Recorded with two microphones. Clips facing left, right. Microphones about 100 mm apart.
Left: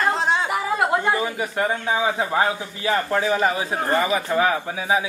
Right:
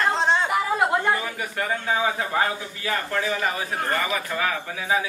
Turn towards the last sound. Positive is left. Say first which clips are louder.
# left 3 dB
turn(degrees=25)  # may be behind; listen again after turning